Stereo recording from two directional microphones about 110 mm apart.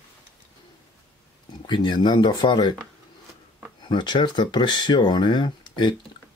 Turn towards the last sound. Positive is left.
turn(degrees=45)  # may be behind; listen again after turning